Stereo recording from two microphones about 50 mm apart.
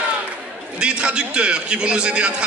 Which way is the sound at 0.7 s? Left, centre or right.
Centre.